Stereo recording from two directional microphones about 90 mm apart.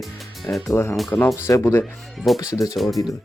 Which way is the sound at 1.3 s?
35° left (ahead or behind).